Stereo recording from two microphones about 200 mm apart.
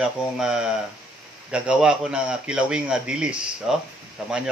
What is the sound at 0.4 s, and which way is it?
A man's voice, 5° right (ahead or behind).